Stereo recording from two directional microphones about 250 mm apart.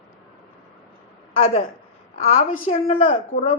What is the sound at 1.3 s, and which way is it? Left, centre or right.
A man's voice, left.